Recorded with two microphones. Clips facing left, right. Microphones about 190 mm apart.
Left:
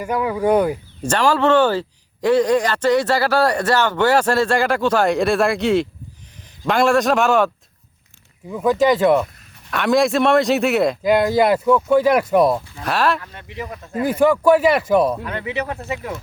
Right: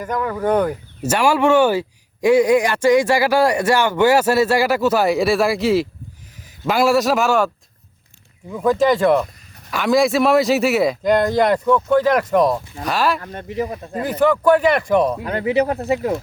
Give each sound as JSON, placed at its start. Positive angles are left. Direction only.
{"t": 0.0, "sound": "speech", "side_deg": 10}
{"t": 1.0, "sound": "a man's voice", "side_deg": -10}
{"t": 13.2, "sound": "speech", "side_deg": -40}
{"t": 14.1, "sound": "a man's voice", "side_deg": 10}
{"t": 15.2, "sound": "speech", "side_deg": -35}